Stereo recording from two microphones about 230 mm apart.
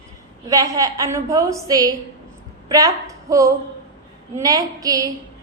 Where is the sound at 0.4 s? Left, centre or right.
Centre.